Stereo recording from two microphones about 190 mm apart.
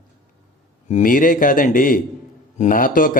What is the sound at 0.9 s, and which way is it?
A man's voice, 45° left (ahead or behind).